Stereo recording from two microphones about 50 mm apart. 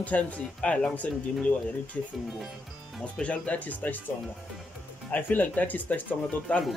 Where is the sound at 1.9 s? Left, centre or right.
Left.